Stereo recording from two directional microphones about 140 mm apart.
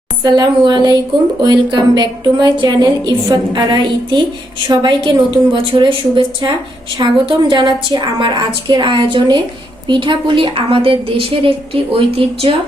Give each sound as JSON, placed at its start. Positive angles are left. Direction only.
{"t": 0.2, "sound": "a woman's voice", "side_deg": -30}